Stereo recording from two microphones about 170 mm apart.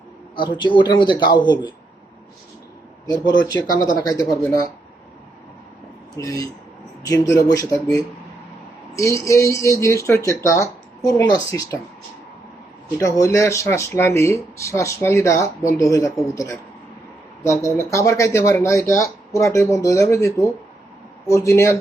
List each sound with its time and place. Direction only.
0.3 s a man's voice: 25° left (ahead or behind)
3.5 s a man's voice: 20° left (ahead or behind)
6.1 s a man's voice: 20° left (ahead or behind)
13.0 s speech: 20° left (ahead or behind)